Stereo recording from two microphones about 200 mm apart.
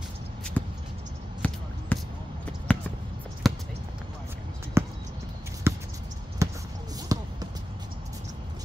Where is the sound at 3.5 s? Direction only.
Centre (ahead or behind).